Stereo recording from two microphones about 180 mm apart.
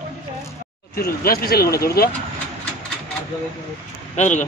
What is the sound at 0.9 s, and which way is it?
Speech, 55° left (ahead or behind).